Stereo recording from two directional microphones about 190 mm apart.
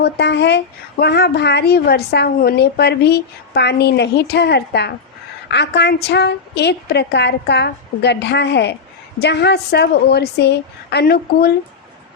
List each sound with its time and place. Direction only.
0.0 s speech: 65° left (ahead or behind)